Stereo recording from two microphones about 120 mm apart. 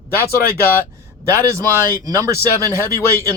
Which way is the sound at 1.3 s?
25° right (ahead or behind).